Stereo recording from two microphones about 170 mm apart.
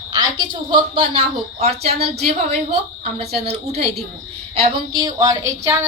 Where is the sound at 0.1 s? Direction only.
25° right (ahead or behind).